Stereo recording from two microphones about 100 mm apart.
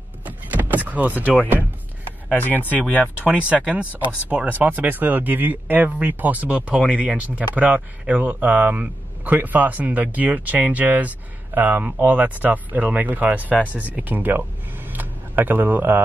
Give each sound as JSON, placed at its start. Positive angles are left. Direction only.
{"t": 0.2, "sound": "power windows", "side_deg": -15}
{"t": 2.3, "sound": "speech", "side_deg": 15}
{"t": 3.3, "sound": "speech", "side_deg": -10}
{"t": 14.9, "sound": "a sound", "side_deg": -20}